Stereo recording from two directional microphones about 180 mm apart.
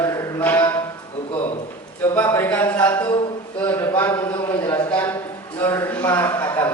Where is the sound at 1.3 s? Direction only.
30° left (ahead or behind).